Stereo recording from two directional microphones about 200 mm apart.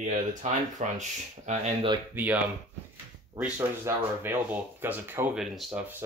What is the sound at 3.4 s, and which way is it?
Speech, 10° right (ahead or behind).